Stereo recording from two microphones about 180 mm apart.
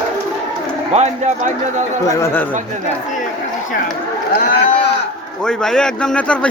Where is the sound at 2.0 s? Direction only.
15° left (ahead or behind).